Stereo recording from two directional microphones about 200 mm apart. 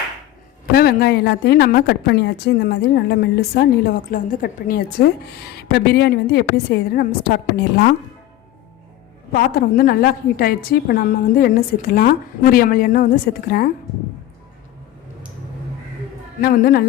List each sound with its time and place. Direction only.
0.7 s a woman's voice: 50° left (ahead or behind)
9.3 s a woman's voice: 45° left (ahead or behind)
16.4 s a woman's voice: 50° left (ahead or behind)